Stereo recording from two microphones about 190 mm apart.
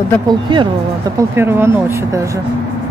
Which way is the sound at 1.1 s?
10° right (ahead or behind).